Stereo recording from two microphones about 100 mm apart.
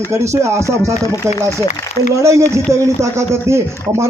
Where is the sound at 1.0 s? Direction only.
35° left (ahead or behind).